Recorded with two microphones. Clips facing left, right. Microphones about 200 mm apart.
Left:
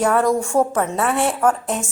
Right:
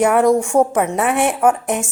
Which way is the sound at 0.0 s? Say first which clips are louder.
Right 4 dB; 20° right (ahead or behind).